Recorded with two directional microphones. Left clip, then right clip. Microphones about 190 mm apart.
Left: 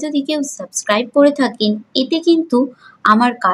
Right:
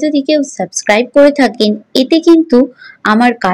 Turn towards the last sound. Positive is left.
turn(degrees=-25)  # may be behind; listen again after turning